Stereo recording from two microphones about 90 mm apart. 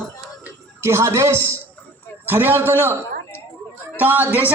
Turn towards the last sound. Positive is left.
turn(degrees=-20)  # may be behind; listen again after turning